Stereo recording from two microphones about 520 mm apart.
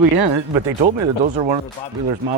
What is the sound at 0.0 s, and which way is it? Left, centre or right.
Speech, right.